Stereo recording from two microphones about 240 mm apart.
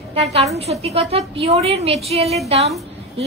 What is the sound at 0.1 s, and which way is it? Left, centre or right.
A woman's voice, right.